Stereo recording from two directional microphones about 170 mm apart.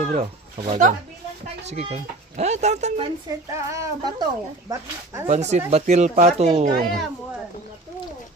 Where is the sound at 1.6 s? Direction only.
40° right (ahead or behind).